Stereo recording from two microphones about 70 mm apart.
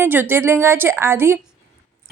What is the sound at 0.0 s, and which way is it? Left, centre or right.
A woman's voice, right.